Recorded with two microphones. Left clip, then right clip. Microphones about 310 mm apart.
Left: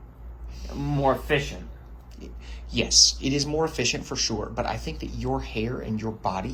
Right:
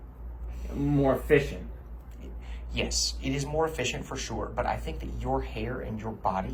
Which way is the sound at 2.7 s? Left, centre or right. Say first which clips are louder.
Left 10 dB; centre.